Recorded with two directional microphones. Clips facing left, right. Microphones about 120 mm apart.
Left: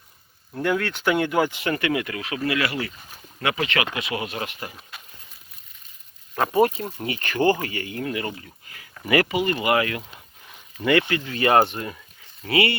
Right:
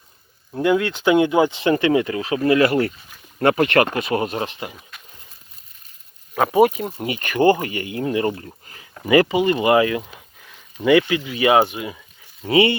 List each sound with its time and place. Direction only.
0.5 s speech: 15° right (ahead or behind)
2.6 s speech: 50° right (ahead or behind)
4.4 s speech: 30° right (ahead or behind)
4.7 s speech: 5° left (ahead or behind)
6.3 s speech: 10° right (ahead or behind)
12.4 s speech: 25° right (ahead or behind)